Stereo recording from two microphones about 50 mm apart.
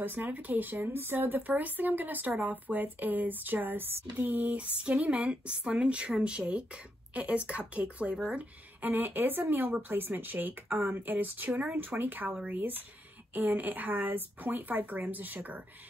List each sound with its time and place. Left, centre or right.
0.0 s speech: right